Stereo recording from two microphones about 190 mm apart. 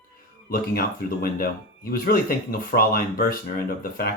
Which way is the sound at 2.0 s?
50° left (ahead or behind).